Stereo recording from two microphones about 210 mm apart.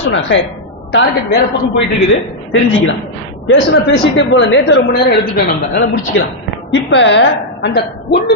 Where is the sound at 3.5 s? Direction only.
60° left (ahead or behind).